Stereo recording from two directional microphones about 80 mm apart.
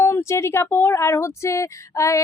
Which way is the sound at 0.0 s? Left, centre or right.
Left.